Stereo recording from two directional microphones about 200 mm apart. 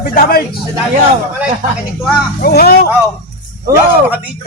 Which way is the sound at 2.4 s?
50° left (ahead or behind).